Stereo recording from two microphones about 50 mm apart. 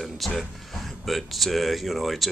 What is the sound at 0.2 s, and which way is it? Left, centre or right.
Speech, centre.